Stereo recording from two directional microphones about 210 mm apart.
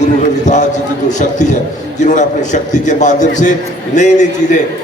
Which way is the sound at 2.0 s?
35° left (ahead or behind).